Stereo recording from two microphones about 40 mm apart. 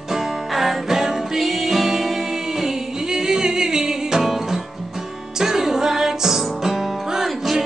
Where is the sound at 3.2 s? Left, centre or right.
Centre.